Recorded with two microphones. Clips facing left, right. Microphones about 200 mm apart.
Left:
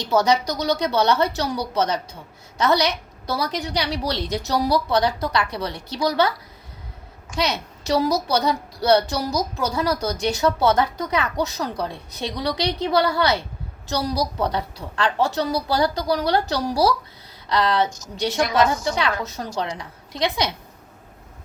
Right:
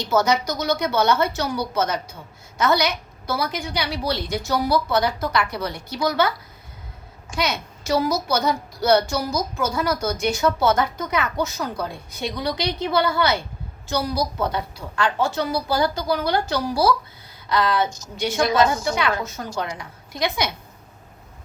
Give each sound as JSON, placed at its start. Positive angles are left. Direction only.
{"t": 0.1, "sound": "a child's voice", "side_deg": 35}
{"t": 7.3, "sound": "a child's voice", "side_deg": 35}
{"t": 18.4, "sound": "a woman's voice", "side_deg": -30}
{"t": 19.4, "sound": "a woman's voice", "side_deg": 30}